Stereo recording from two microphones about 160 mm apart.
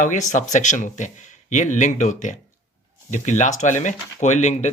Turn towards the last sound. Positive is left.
turn(degrees=45)  # may be behind; listen again after turning